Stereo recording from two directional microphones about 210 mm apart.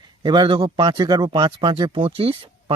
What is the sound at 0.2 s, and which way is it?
Speech, 20° right (ahead or behind).